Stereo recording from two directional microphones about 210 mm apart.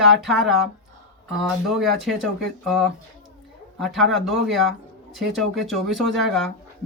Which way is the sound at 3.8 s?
Centre (ahead or behind).